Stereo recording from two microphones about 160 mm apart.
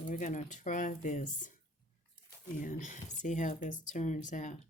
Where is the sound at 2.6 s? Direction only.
55° left (ahead or behind).